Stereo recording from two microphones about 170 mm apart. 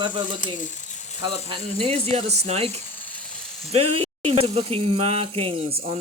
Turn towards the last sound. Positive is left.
turn(degrees=-35)  # may be behind; listen again after turning